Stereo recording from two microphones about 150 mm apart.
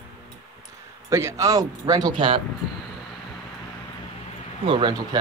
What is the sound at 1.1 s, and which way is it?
Speech, 20° right (ahead or behind).